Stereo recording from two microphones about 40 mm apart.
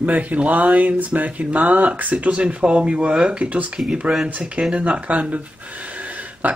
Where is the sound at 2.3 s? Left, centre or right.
Right.